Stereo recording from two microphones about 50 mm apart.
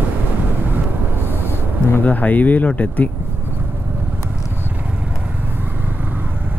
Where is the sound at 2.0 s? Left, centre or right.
Left.